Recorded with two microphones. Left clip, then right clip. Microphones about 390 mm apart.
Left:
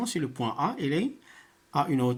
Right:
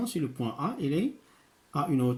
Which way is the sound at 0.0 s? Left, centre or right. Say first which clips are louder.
Left 2 dB; centre.